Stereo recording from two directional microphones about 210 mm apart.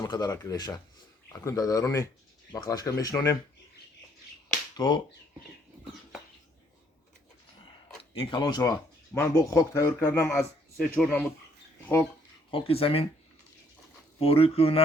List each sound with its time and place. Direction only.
0.0 s a man's voice: 15° left (ahead or behind)
8.1 s a man's voice: 20° left (ahead or behind)
12.5 s speech: 25° left (ahead or behind)
14.2 s speech: 25° left (ahead or behind)